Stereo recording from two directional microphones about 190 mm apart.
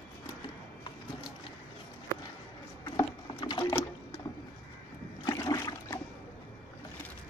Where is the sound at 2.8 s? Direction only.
20° left (ahead or behind).